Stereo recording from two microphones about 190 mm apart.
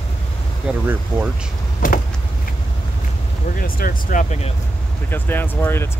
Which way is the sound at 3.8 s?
45° left (ahead or behind).